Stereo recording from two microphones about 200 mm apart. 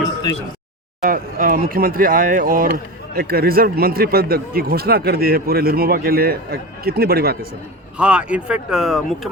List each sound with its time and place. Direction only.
1.0 s speech: 45° right (ahead or behind)
7.9 s speech: 5° right (ahead or behind)